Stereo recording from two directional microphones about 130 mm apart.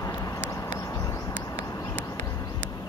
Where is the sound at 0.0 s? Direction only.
25° left (ahead or behind).